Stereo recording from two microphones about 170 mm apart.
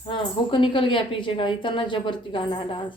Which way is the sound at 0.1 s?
30° left (ahead or behind).